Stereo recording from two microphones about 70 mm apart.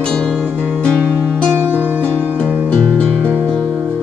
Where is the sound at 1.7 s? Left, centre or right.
Right.